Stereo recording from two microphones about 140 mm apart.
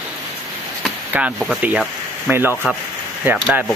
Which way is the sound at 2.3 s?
15° right (ahead or behind).